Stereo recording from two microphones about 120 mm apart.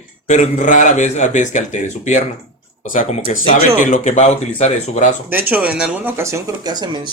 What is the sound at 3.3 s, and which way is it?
A man's voice, 90° left.